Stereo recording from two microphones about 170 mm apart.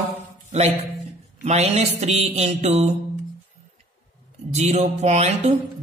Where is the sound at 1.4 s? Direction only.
40° right (ahead or behind).